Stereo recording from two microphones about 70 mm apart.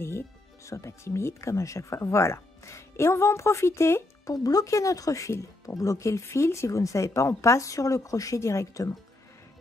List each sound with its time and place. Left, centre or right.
0.7 s speech: left
4.3 s speech: left